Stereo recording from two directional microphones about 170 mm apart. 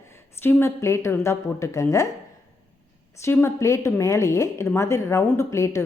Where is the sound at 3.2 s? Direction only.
15° left (ahead or behind).